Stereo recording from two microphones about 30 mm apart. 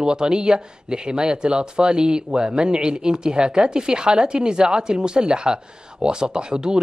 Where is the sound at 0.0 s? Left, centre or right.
Right.